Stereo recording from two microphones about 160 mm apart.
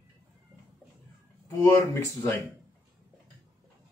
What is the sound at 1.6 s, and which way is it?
Speech, 15° left (ahead or behind).